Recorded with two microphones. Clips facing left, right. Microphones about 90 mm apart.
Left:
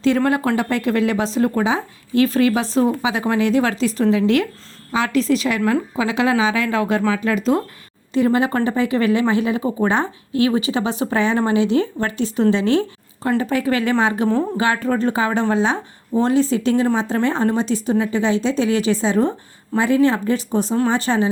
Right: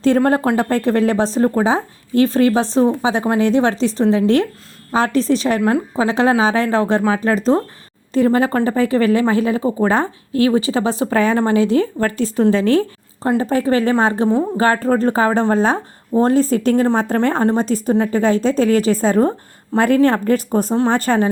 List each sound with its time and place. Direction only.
0.3 s speech: 40° right (ahead or behind)